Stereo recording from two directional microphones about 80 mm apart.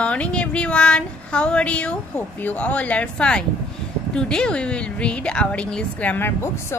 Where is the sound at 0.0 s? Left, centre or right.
Centre.